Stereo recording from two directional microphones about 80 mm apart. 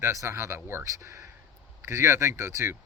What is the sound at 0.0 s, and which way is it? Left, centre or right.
Speech, right.